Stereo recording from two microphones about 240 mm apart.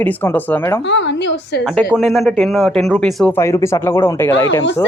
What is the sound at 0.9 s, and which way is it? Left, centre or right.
Speech, left.